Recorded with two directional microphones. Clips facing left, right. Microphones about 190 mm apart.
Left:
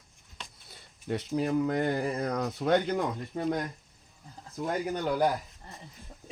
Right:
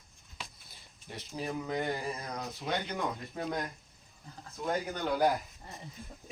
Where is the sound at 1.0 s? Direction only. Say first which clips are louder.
Left 9 dB; 70° left (ahead or behind); by 3.0 s 50° left (ahead or behind).